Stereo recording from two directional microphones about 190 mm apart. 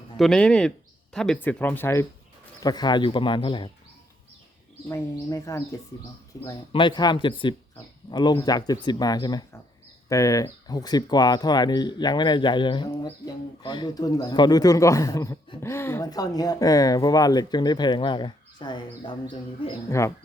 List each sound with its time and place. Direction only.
0.2 s speech: 5° left (ahead or behind); by 3.7 s 25° left (ahead or behind)
4.9 s speech: 15° left (ahead or behind)